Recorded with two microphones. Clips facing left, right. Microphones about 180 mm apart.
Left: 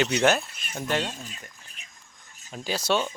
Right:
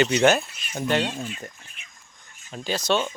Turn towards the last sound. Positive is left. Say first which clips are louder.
# right 2 dB
turn(degrees=10)  # may be behind; listen again after turning